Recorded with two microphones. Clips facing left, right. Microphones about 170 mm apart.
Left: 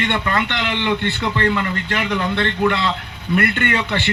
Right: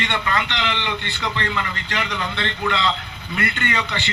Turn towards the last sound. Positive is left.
turn(degrees=55)  # may be behind; listen again after turning